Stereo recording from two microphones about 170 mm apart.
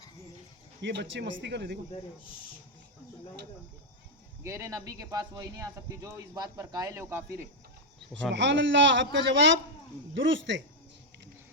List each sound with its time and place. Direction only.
0.8 s speech: 90° right
4.4 s speech: 15° right (ahead or behind)
8.3 s speech: 90° right